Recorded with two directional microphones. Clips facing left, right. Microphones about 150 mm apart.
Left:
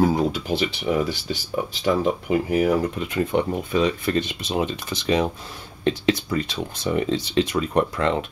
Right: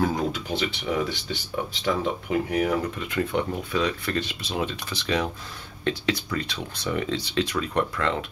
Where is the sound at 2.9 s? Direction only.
20° left (ahead or behind).